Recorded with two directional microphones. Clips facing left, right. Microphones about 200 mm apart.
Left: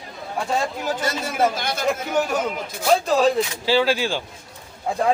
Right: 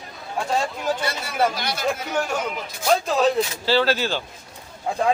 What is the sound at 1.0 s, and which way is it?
Speech, 45° left (ahead or behind).